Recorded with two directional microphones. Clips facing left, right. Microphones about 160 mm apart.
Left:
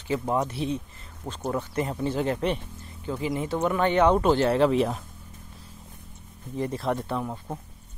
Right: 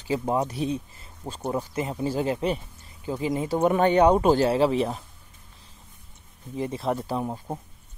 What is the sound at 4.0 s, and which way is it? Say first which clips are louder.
Speech: even; 15° right (ahead or behind).